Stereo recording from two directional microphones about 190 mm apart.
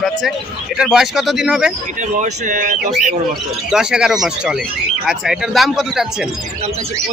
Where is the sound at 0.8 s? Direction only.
Centre (ahead or behind).